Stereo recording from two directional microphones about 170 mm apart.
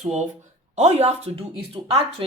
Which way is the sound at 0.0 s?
40° right (ahead or behind).